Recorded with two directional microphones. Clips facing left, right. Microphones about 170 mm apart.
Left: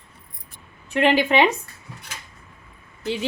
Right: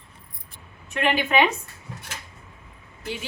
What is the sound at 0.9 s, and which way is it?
Speech, 30° left (ahead or behind).